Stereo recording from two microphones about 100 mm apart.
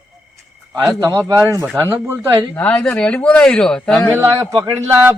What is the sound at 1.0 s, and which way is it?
Speech, 35° right (ahead or behind).